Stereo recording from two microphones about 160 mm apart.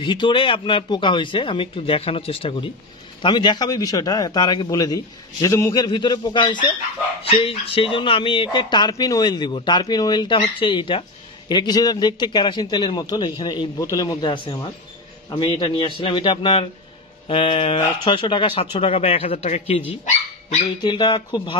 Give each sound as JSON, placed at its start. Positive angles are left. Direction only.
{"t": 0.0, "sound": "a man's voice", "side_deg": 30}
{"t": 20.8, "sound": "a man's voice", "side_deg": 25}